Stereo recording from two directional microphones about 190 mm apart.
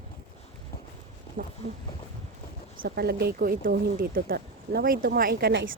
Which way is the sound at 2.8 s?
55° right (ahead or behind).